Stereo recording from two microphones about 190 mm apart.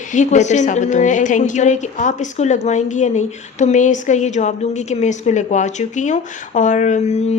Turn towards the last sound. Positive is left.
turn(degrees=40)  # may be behind; listen again after turning